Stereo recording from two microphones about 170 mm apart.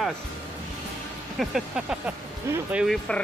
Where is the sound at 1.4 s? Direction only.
Centre (ahead or behind).